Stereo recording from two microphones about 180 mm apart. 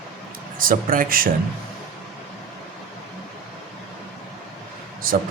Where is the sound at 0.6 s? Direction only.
50° right (ahead or behind).